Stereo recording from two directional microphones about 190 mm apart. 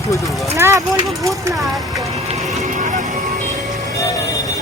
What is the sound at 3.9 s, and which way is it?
Vehicle, 15° left (ahead or behind).